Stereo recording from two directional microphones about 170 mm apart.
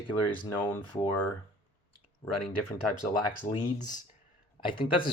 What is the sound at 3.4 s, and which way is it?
Speech, 35° left (ahead or behind).